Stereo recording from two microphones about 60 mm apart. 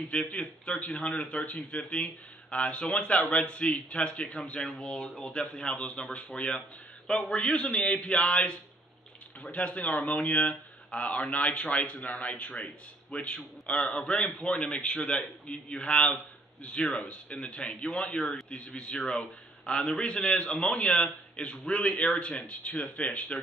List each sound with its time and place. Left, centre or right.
0.1 s a man's voice: centre